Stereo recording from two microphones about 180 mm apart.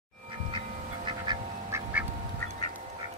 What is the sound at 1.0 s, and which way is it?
Quack, 25° right (ahead or behind).